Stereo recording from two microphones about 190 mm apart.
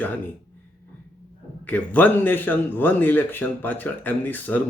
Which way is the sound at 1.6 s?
10° left (ahead or behind).